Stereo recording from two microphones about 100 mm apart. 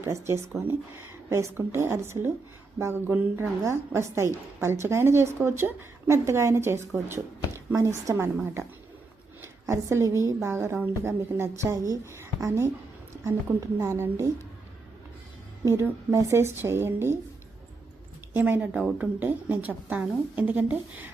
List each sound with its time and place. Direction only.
0.0 s a woman's voice: 25° right (ahead or behind)
13.7 s a woman's voice: 25° right (ahead or behind)
15.6 s a woman's voice: 30° right (ahead or behind)
18.3 s a woman's voice: 20° right (ahead or behind)